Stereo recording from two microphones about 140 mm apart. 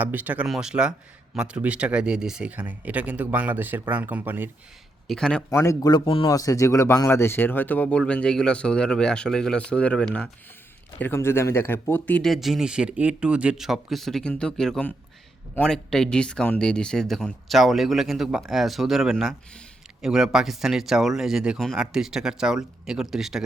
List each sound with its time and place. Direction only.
0.0 s speech: 10° right (ahead or behind)
5.0 s speech: 5° left (ahead or behind)
5.5 s speech: 20° left (ahead or behind); by 23.4 s 5° right (ahead or behind)